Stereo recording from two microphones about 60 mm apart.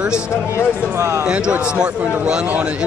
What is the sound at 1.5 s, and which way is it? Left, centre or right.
Speech, centre.